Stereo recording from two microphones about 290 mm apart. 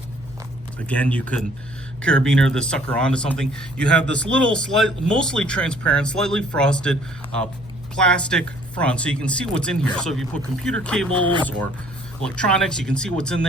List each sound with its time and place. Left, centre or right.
0.9 s speech: centre